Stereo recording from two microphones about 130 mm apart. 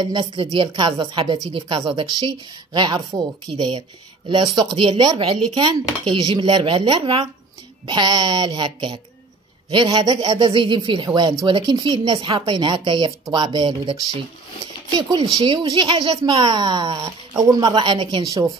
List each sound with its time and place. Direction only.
0.0 s a man's voice: 35° right (ahead or behind)
12.2 s speech: 40° right (ahead or behind)
15.0 s speech: 35° right (ahead or behind)